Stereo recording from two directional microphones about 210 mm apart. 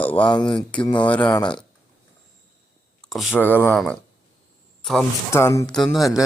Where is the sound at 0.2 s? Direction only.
20° left (ahead or behind).